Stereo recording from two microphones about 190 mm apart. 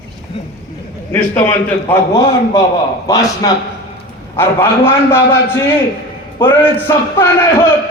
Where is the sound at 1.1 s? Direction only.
10° left (ahead or behind).